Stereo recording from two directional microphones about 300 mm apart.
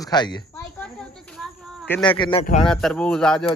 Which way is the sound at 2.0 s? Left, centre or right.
Centre.